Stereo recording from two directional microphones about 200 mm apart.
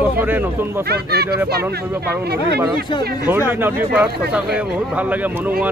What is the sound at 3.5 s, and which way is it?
A man's voice, 10° right (ahead or behind).